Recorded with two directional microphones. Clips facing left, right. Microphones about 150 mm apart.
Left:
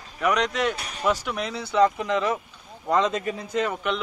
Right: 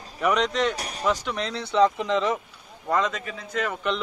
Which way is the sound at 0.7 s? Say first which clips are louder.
Right 2 dB; 40° right (ahead or behind).